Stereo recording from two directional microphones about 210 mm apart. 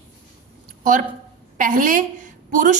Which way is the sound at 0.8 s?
35° right (ahead or behind).